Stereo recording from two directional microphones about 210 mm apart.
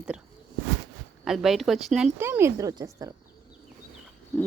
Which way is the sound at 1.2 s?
Centre (ahead or behind).